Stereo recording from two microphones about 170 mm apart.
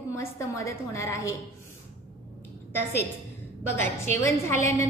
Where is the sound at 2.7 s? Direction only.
10° left (ahead or behind).